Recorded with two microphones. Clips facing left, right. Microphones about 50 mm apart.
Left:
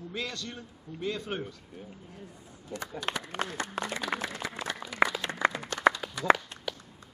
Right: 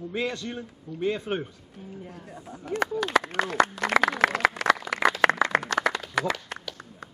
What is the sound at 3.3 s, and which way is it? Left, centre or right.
Speech, right.